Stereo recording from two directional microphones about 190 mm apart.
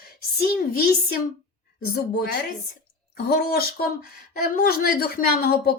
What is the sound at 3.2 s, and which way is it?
A woman's voice, 55° left (ahead or behind).